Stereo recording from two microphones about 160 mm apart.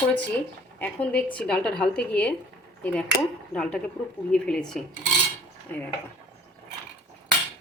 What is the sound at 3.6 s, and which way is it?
Speech, 5° left (ahead or behind).